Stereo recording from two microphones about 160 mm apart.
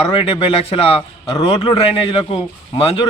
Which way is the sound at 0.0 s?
35° left (ahead or behind).